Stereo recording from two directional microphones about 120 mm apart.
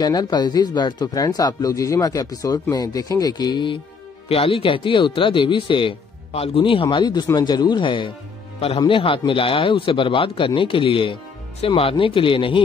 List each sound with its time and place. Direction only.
0.0 s speech: 35° left (ahead or behind)